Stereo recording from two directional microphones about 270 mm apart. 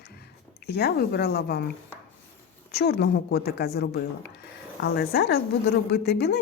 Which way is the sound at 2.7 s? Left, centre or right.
Left.